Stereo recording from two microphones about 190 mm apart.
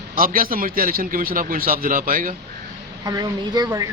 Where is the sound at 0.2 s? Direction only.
45° right (ahead or behind).